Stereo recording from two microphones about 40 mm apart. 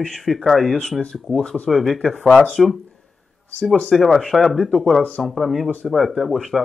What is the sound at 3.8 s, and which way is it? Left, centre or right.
Speech, centre.